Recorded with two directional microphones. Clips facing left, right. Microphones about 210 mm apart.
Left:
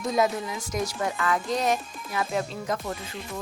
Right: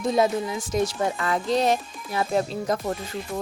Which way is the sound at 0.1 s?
30° right (ahead or behind).